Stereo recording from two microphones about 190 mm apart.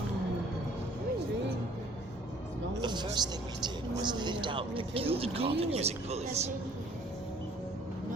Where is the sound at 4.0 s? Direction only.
25° right (ahead or behind).